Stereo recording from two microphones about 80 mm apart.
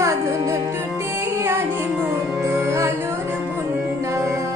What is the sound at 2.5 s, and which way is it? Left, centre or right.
Music, right.